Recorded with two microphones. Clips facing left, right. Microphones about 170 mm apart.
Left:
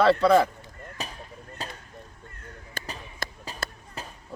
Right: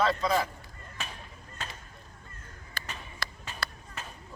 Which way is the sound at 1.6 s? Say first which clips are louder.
Left 4 dB; 35° left (ahead or behind).